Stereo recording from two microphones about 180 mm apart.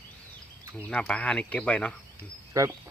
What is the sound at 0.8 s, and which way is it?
Speech, 5° left (ahead or behind).